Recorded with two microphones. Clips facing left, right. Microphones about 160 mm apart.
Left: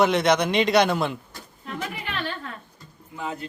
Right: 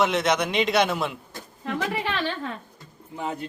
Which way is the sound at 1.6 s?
90° right.